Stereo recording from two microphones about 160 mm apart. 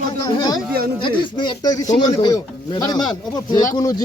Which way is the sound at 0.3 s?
25° left (ahead or behind).